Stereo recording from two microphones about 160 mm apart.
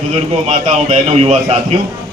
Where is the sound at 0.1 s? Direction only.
45° right (ahead or behind).